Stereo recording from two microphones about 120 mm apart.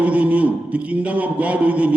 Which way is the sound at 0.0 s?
10° right (ahead or behind).